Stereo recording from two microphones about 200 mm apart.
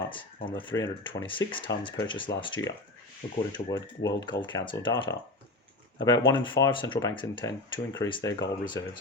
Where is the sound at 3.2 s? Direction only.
35° left (ahead or behind).